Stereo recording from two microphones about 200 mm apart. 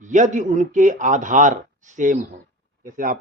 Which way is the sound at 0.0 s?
40° right (ahead or behind).